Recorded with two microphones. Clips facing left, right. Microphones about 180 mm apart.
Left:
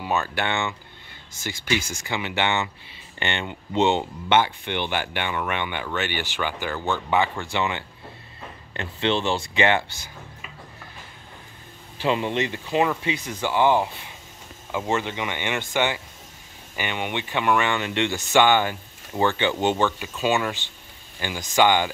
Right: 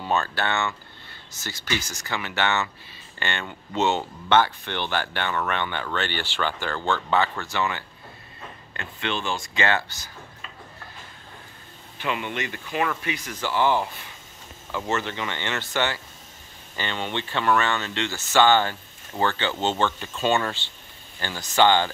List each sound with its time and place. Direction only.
0.0 s speech: 15° left (ahead or behind)
12.0 s speech: 30° left (ahead or behind); by 21.9 s 15° left (ahead or behind)